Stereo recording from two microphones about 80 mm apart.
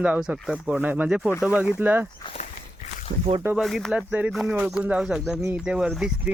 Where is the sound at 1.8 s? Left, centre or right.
Right.